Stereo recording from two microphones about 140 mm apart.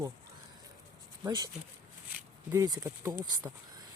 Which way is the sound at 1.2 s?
30° right (ahead or behind).